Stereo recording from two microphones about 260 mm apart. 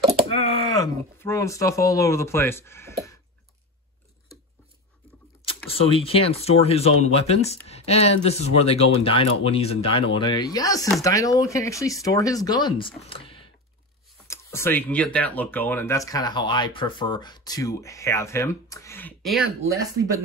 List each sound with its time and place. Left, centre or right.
0.4 s speech: centre
5.7 s speech: left
14.2 s a sound: centre
15.1 s speech: centre